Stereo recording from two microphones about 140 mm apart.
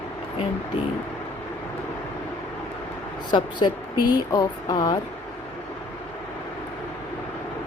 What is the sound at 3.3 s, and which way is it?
Speech, 30° left (ahead or behind).